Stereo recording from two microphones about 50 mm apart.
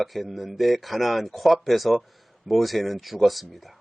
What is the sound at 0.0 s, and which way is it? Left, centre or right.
Speech, centre.